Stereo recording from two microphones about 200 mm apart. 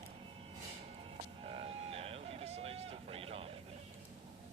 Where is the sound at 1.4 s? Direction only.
30° right (ahead or behind).